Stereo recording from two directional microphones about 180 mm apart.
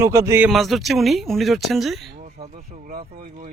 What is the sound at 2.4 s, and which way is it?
Speech, 50° right (ahead or behind).